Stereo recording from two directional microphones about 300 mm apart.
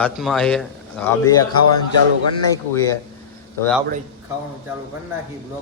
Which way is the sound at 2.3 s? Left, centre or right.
Centre.